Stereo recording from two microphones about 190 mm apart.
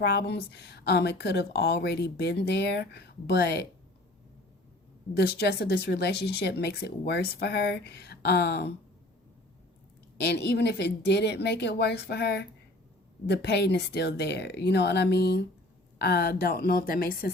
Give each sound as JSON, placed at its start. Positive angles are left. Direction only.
{"t": 0.0, "sound": "a woman's voice", "side_deg": 60}
{"t": 5.1, "sound": "a woman's voice", "side_deg": 55}
{"t": 10.2, "sound": "a woman's voice", "side_deg": 60}